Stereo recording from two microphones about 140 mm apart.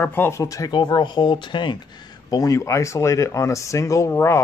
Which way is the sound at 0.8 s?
35° left (ahead or behind).